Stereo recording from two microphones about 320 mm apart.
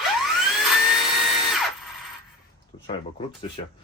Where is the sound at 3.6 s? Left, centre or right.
Centre.